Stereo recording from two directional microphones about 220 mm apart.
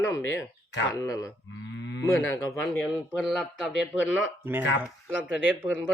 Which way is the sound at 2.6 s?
Centre (ahead or behind).